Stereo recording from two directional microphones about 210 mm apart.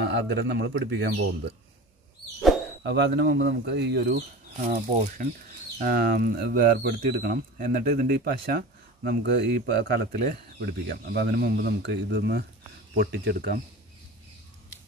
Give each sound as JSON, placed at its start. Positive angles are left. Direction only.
{"t": 0.0, "sound": "speech", "side_deg": -55}
{"t": 2.8, "sound": "speech", "side_deg": -55}
{"t": 4.6, "sound": "speech", "side_deg": -40}